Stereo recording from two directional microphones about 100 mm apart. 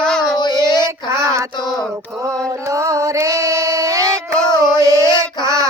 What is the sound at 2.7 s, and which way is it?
Female singing, 30° right (ahead or behind).